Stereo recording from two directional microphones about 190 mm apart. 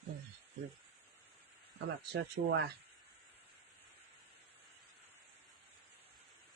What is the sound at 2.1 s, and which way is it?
Speech, 75° right (ahead or behind).